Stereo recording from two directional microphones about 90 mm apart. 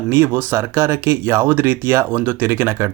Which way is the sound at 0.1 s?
25° right (ahead or behind).